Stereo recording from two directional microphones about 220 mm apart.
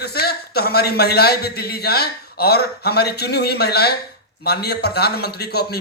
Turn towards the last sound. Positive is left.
turn(degrees=45)  # may be behind; listen again after turning